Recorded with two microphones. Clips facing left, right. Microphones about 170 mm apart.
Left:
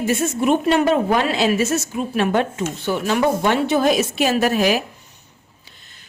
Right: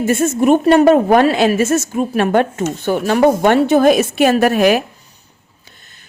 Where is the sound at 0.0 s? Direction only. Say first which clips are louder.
Right 5 dB; 50° right (ahead or behind).